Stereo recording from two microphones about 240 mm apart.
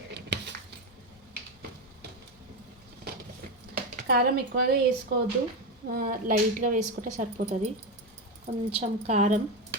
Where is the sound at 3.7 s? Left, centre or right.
Right.